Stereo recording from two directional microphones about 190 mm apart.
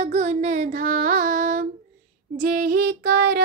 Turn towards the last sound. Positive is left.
turn(degrees=-55)  # may be behind; listen again after turning